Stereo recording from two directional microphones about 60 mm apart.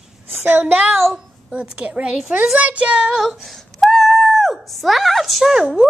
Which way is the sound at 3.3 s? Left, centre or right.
Centre.